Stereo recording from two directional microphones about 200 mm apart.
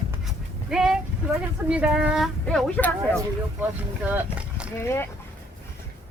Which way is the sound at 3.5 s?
10° right (ahead or behind).